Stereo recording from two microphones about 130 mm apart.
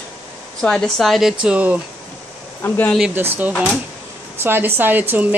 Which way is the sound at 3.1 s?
15° right (ahead or behind).